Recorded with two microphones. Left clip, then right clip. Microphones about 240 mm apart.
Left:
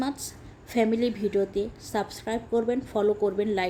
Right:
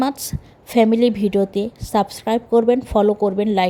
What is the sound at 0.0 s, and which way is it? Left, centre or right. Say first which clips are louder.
A woman's voice: right 10 dB; right.